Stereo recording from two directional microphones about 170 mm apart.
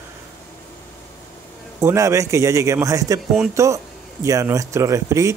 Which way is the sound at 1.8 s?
15° right (ahead or behind).